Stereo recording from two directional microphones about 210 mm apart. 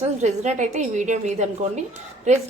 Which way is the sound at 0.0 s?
35° right (ahead or behind).